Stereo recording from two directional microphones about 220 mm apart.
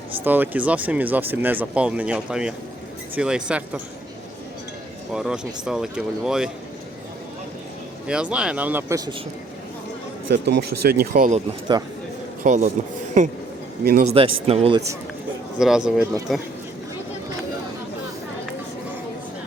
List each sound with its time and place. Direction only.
0.3 s speech: 10° right (ahead or behind)
5.1 s speech: 5° right (ahead or behind)
8.0 s speech: 5° right (ahead or behind)
10.3 s speech: 50° right (ahead or behind)
11.7 s speech: 15° right (ahead or behind)
12.4 s a man's voice: 30° right (ahead or behind)
13.8 s speech: 40° right (ahead or behind)
14.4 s speech: 25° right (ahead or behind)
15.5 s speech: 5° right (ahead or behind)